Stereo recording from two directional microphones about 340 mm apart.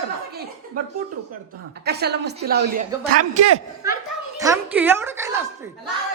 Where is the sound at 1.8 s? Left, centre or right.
Right.